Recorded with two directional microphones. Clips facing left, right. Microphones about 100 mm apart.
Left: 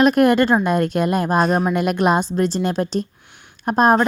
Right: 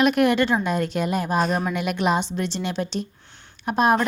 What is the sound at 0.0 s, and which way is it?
A woman's voice, 40° left (ahead or behind).